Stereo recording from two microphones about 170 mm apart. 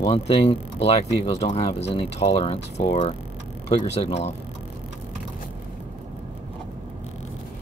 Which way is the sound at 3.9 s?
40° left (ahead or behind).